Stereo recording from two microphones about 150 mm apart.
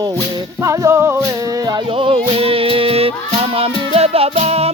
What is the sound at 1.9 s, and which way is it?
Music, 35° right (ahead or behind).